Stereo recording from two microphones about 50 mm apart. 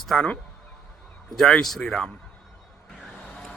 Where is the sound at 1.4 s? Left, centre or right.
Centre.